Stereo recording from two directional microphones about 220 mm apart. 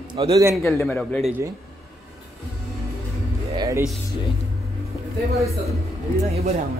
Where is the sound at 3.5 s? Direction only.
20° right (ahead or behind).